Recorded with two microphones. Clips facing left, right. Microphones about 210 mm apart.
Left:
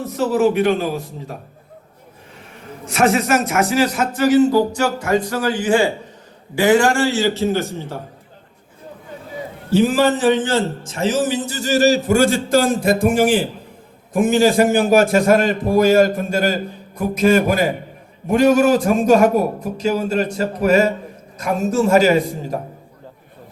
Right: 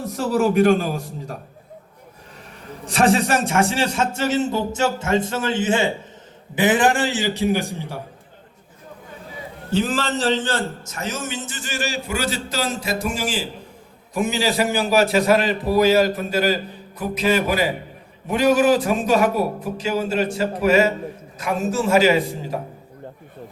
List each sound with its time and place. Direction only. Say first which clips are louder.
0.2 s a man's voice: left 2 dB; 40° right (ahead or behind)
2.8 s a man's voice: left 1 dB; 35° right (ahead or behind); by 7.9 s 15° right (ahead or behind)
9.7 s a man's voice: left 6 dB; 10° left (ahead or behind)
10.5 s a man's voice: left 6 dB; 30° left (ahead or behind)